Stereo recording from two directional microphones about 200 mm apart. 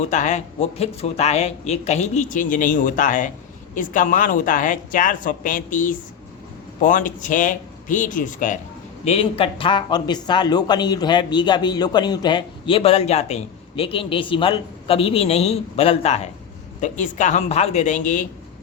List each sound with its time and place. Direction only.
0.1 s speech: 35° left (ahead or behind)
9.0 s a man's voice: 30° left (ahead or behind)